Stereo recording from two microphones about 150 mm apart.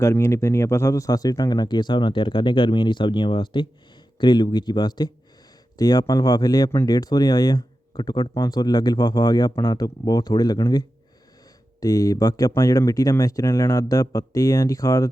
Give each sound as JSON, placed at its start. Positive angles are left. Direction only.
{"t": 0.0, "sound": "speech", "side_deg": 20}